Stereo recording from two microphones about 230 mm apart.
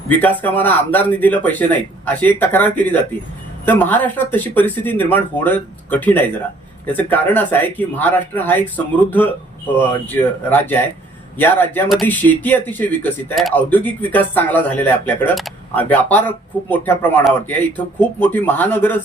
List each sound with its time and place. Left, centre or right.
0.1 s speech: centre